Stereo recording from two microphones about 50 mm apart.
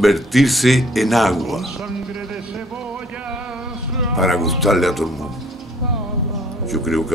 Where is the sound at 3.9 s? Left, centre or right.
Centre.